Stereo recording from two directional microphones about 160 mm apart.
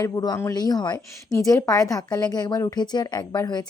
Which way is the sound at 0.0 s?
20° left (ahead or behind).